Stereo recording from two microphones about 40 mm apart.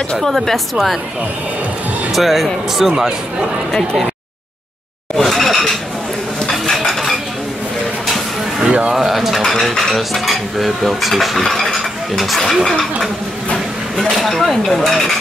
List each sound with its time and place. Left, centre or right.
0.2 s speech: centre
2.1 s speech: centre
3.0 s speech: centre
5.1 s a sound: centre
6.6 s cutlery: centre
8.6 s a sound: right
8.9 s cutlery: centre
12.6 s speech: centre
13.9 s a sound: centre
14.9 s speech: centre